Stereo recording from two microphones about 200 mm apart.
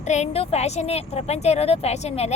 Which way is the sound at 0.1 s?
35° left (ahead or behind).